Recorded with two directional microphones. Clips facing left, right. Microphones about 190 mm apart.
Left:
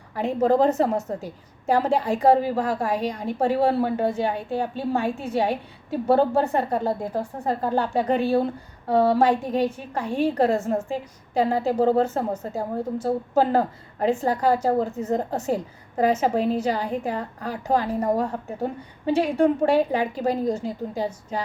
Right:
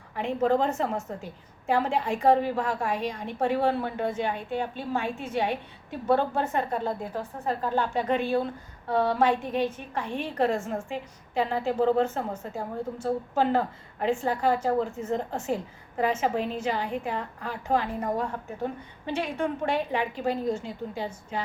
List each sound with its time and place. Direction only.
0.2 s a woman's voice: 40° left (ahead or behind)